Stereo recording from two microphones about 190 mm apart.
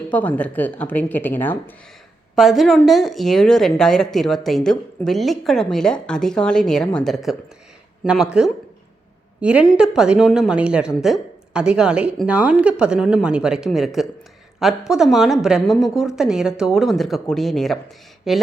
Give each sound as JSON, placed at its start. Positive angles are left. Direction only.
{"t": 0.1, "sound": "speech", "side_deg": 10}
{"t": 2.3, "sound": "speech", "side_deg": 0}